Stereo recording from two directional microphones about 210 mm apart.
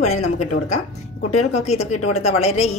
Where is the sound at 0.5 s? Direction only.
65° left (ahead or behind).